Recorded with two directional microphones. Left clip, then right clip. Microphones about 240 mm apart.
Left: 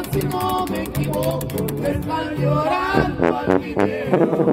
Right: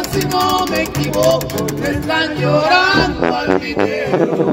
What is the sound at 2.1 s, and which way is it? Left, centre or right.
Music, right.